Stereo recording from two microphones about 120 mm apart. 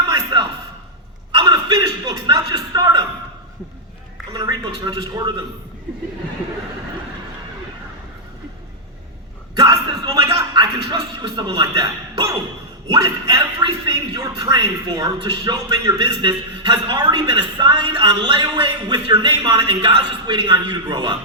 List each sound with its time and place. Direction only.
0.1 s a sound: 40° right (ahead or behind)
4.4 s a man's voice: 35° right (ahead or behind)
9.6 s music: 30° right (ahead or behind)
10.3 s speech: 40° right (ahead or behind)
12.9 s a man's voice: 35° right (ahead or behind)
14.2 s a man's voice: 30° right (ahead or behind)